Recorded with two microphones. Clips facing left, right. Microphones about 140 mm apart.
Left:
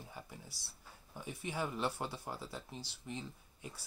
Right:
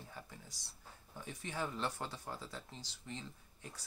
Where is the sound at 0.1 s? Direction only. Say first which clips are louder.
Left 2 dB; 15° left (ahead or behind).